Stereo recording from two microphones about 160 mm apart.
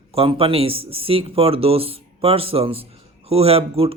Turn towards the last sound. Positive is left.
turn(degrees=-35)  # may be behind; listen again after turning